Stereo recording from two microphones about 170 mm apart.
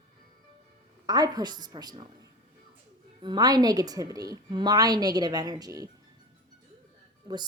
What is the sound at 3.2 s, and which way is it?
A woman's voice, 25° right (ahead or behind).